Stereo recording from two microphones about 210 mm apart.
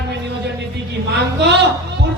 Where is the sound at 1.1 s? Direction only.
55° right (ahead or behind).